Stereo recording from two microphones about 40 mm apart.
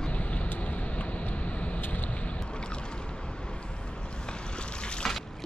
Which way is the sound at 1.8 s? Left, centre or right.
Left.